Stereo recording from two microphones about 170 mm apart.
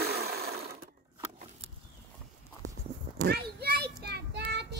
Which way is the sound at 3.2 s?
65° right (ahead or behind).